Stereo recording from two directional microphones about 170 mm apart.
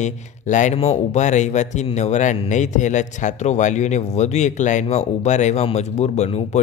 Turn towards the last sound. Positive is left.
turn(degrees=40)  # may be behind; listen again after turning